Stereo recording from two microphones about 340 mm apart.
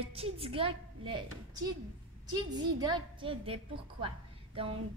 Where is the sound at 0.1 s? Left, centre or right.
Centre.